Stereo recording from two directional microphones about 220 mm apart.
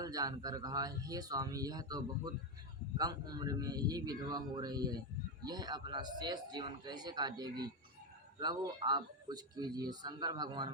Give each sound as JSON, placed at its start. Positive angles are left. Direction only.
{"t": 0.0, "sound": "speech", "side_deg": -15}